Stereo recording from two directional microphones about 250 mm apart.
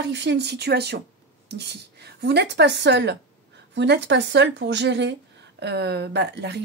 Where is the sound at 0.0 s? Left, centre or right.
Right.